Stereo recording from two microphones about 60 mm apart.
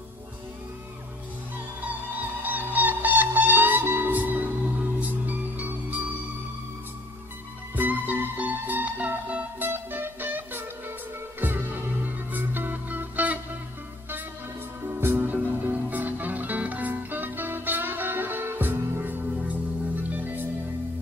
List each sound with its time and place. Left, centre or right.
2.4 s music: right
7.7 s music: right
14.9 s music: right